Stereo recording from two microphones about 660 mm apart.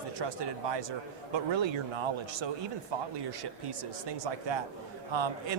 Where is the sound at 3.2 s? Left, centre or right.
Right.